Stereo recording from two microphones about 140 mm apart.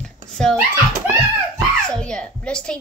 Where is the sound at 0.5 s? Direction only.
15° right (ahead or behind).